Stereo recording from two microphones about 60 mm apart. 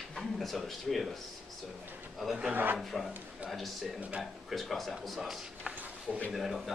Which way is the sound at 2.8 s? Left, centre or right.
Centre.